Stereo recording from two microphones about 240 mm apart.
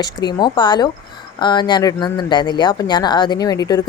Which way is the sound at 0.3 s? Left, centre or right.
Centre.